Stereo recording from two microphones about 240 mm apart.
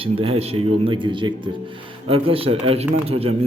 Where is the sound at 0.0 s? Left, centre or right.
Right.